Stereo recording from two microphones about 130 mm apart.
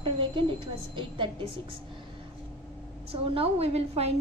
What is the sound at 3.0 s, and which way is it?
A woman's voice, 50° right (ahead or behind).